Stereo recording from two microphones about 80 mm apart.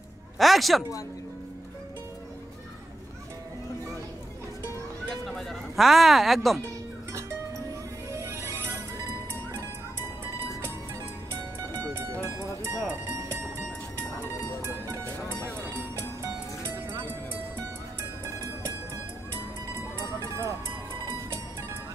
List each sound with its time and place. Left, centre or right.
0.4 s speech: centre
5.5 s speech: centre
8.1 s music: right
11.9 s music: right
16.2 s music: right
20.2 s music: right